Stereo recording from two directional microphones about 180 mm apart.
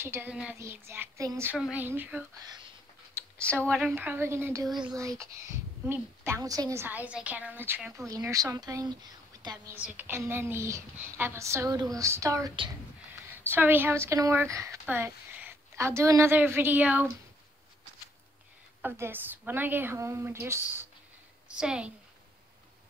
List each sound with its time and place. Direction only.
0.0 s speech: 10° right (ahead or behind)
2.4 s speech: 20° right (ahead or behind)
3.4 s speech: 5° left (ahead or behind)
3.8 s speech: 10° right (ahead or behind)
9.8 s speech: 10° right (ahead or behind)
13.5 s speech: 10° right (ahead or behind)
18.8 s a woman's voice: 10° right (ahead or behind)